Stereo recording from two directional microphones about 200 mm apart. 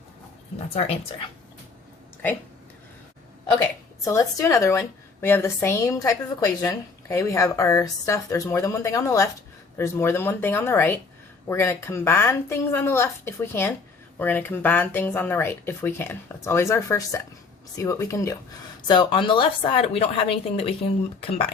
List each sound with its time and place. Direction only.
0.7 s speech: 30° left (ahead or behind)
4.0 s a woman's voice: 15° left (ahead or behind)